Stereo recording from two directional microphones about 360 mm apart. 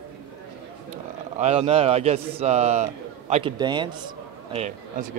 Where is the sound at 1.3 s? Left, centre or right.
Centre.